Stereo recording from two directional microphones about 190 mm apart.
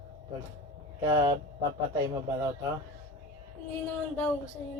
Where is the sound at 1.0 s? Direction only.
20° right (ahead or behind).